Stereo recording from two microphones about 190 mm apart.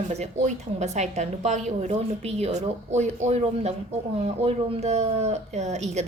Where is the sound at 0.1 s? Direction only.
35° right (ahead or behind).